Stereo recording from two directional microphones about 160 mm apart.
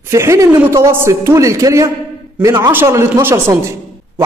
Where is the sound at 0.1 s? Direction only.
20° right (ahead or behind).